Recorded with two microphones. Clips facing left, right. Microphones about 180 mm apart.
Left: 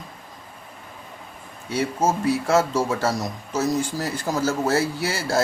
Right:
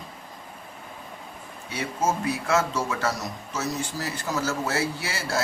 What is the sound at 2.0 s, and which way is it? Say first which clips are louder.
A man's voice: left 3 dB; 30° left (ahead or behind).